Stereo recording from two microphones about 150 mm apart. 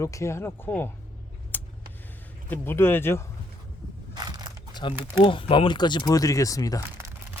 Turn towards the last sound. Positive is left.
turn(degrees=20)  # may be behind; listen again after turning